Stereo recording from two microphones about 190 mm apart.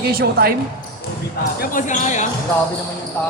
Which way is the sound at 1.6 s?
45° left (ahead or behind).